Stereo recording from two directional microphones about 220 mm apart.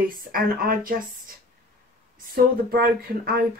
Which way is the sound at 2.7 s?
45° right (ahead or behind).